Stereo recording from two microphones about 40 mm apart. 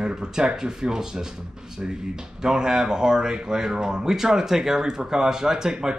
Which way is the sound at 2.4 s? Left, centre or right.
Centre.